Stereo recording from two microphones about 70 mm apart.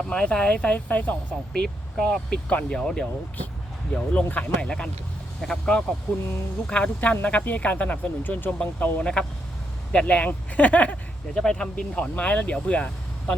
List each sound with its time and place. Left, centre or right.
0.0 s speech: centre
1.5 s speech: centre
5.4 s speech: centre
11.3 s speech: centre